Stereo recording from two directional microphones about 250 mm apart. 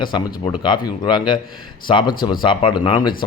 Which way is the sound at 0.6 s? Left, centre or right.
Centre.